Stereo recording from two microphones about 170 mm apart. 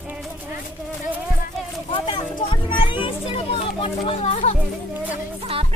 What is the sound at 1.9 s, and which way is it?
Children playing, 30° left (ahead or behind).